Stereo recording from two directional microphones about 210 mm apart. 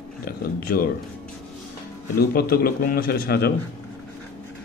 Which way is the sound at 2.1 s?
45° left (ahead or behind).